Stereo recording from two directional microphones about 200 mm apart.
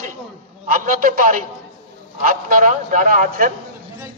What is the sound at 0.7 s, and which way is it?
A man's voice, 40° right (ahead or behind).